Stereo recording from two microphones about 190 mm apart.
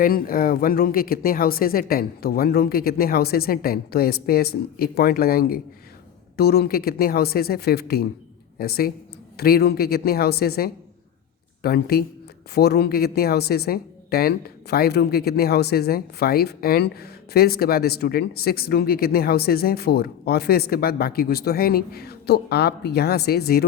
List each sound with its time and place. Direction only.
0.0 s a woman's voice: 50° left (ahead or behind)